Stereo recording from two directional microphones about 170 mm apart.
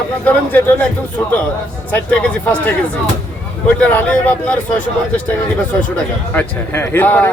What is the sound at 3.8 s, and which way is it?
A man's voice, 10° left (ahead or behind).